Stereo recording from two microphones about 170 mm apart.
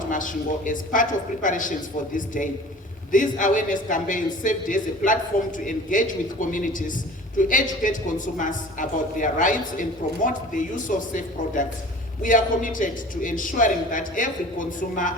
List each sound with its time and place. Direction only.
0.1 s speech: 50° left (ahead or behind)